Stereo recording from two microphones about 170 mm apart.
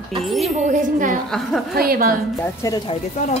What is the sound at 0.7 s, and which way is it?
Speech, 50° right (ahead or behind).